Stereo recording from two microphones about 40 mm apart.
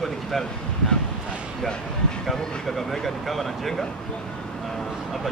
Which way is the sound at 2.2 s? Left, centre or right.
Centre.